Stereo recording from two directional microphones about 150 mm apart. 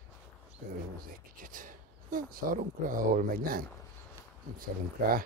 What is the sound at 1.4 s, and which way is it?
Speech, 60° right (ahead or behind).